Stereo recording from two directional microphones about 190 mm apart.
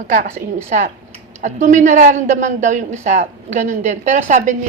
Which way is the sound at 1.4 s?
40° right (ahead or behind).